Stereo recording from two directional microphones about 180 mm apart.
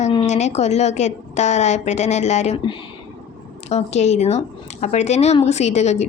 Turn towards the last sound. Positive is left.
turn(degrees=40)  # may be behind; listen again after turning